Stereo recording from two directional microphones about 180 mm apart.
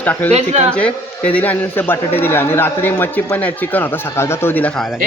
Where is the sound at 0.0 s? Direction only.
10° left (ahead or behind).